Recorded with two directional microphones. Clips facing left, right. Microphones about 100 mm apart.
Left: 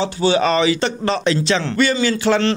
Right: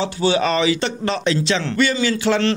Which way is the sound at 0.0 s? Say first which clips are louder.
Left 2 dB; 30° left (ahead or behind).